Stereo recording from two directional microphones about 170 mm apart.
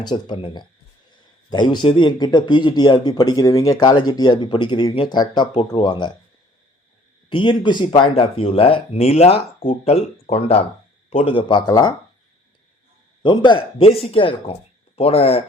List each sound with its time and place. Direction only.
0.0 s a man's voice: 25° left (ahead or behind)
7.3 s a man's voice: 30° left (ahead or behind)
13.2 s speech: 25° left (ahead or behind)